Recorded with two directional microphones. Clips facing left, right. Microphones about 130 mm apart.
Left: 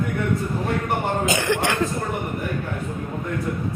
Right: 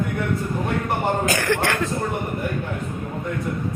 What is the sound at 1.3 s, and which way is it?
Speech, 20° left (ahead or behind).